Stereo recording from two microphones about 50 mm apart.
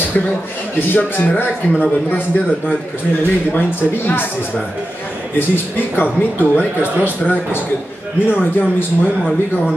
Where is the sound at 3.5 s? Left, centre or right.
Left.